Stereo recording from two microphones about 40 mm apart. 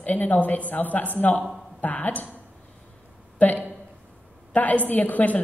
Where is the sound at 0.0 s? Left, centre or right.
Left.